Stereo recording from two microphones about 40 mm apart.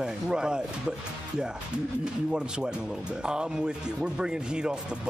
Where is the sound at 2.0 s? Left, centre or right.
Centre.